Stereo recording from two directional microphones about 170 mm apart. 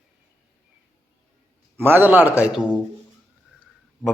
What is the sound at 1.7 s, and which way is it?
A man's voice, 10° right (ahead or behind).